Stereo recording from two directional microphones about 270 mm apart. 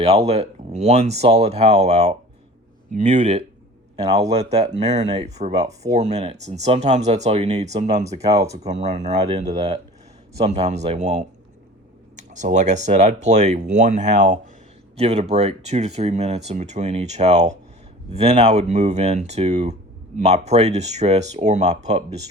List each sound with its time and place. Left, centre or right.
0.0 s speech: right
4.0 s speech: centre
4.8 s speech: right